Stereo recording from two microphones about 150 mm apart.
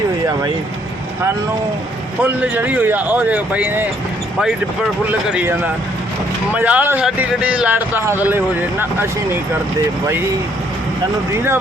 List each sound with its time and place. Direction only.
2.2 s speech: 10° right (ahead or behind)
5.0 s speech: 10° right (ahead or behind)